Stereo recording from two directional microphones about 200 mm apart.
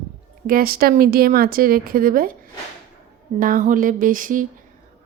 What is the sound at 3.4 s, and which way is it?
A woman's voice, 40° right (ahead or behind).